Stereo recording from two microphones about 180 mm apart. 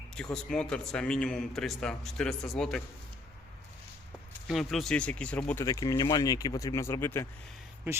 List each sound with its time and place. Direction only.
0.1 s a man's voice: 5° left (ahead or behind)
4.4 s a man's voice: centre (ahead or behind)
5.6 s speech: 20° left (ahead or behind)